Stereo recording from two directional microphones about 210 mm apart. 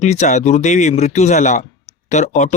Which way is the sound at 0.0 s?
35° left (ahead or behind).